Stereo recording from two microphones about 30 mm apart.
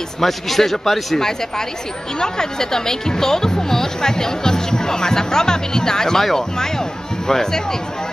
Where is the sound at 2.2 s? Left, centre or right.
Left.